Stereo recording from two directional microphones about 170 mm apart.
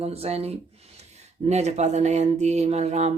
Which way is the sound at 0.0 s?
35° right (ahead or behind).